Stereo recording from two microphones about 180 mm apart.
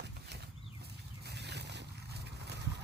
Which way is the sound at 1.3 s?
70° right (ahead or behind).